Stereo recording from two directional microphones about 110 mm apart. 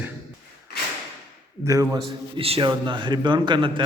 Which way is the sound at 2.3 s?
65° right (ahead or behind).